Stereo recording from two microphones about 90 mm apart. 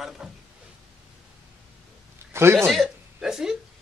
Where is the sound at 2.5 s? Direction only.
5° left (ahead or behind).